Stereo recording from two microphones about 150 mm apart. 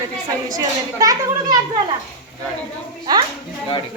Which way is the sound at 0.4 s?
25° right (ahead or behind).